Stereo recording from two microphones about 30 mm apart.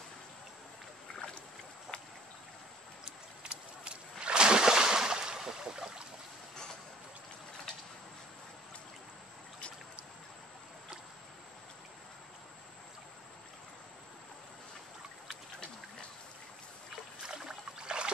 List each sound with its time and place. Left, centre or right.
1.9 s boat: left
3.1 s a sound: right
17.2 s boat: centre
17.7 s rowboat: right